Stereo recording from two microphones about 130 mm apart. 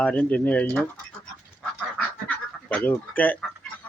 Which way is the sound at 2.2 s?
15° left (ahead or behind).